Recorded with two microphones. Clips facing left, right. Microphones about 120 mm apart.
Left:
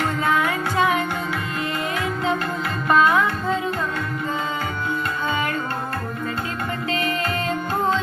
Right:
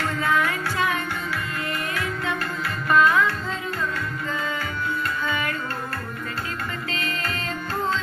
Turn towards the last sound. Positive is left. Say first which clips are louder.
# left 6 dB
turn(degrees=20)  # may be behind; listen again after turning